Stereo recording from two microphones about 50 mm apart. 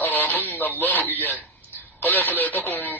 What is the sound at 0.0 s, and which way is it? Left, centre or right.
Radio, left.